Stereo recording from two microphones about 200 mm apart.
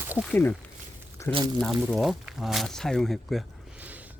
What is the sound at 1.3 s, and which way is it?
Speech, 25° right (ahead or behind).